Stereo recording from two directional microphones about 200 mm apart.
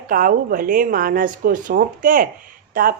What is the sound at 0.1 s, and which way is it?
A woman's voice, 45° right (ahead or behind).